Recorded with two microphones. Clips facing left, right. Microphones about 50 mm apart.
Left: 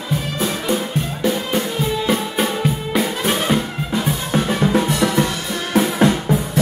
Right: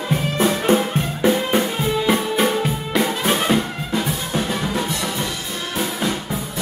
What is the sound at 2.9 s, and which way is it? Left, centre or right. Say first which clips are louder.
Music: right 2 dB; centre.